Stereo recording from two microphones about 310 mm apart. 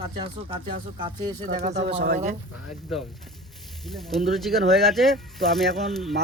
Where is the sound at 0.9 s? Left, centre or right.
Centre.